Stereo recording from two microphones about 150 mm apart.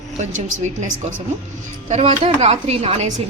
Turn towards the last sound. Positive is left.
turn(degrees=-45)  # may be behind; listen again after turning